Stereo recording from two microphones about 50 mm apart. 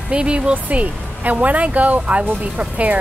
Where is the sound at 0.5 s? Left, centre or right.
Right.